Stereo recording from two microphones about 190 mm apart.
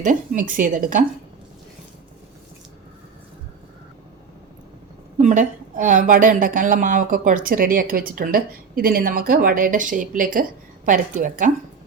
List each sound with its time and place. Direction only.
0.0 s a woman's voice: 45° right (ahead or behind)
5.1 s a woman's voice: 40° right (ahead or behind)